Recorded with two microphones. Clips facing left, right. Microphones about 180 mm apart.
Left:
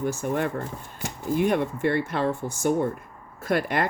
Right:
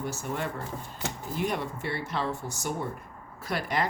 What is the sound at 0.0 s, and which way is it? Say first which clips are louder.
Speech: left 7 dB; 55° left (ahead or behind).